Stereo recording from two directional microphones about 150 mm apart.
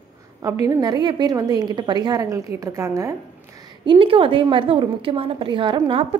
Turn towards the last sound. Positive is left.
turn(degrees=-35)  # may be behind; listen again after turning